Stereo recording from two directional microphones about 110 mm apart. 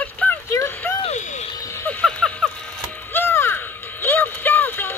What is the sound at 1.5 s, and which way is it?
Music, 30° left (ahead or behind).